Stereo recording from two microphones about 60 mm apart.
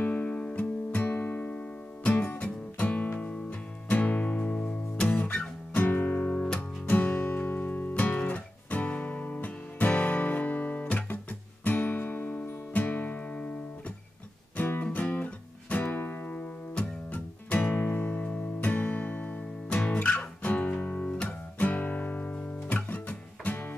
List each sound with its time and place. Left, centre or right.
0.0 s music: left
0.6 s music: left
14.6 s music: left
21.1 s music: centre
21.5 s guitar: left